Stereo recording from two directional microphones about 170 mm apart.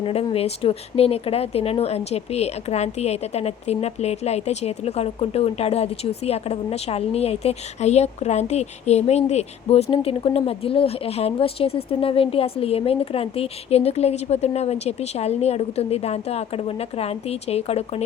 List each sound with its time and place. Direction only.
0.0 s speech: 35° left (ahead or behind)